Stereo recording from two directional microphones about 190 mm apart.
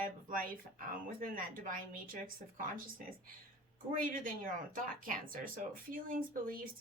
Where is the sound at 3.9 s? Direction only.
45° right (ahead or behind).